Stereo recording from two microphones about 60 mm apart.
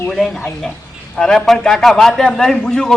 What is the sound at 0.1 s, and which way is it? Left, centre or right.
A man's voice, centre.